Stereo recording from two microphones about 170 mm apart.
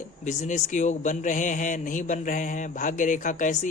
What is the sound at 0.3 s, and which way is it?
A man's voice, 45° left (ahead or behind).